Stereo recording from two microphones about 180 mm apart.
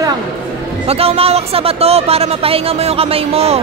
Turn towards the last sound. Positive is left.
turn(degrees=-35)  # may be behind; listen again after turning